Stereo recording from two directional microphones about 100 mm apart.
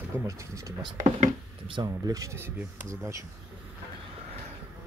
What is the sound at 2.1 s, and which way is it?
Speech, 35° right (ahead or behind).